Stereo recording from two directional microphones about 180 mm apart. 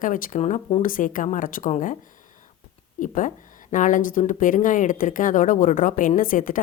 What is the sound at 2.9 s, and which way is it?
Speech, 45° left (ahead or behind).